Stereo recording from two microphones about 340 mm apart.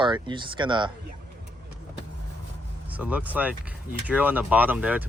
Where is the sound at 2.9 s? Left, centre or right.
Centre.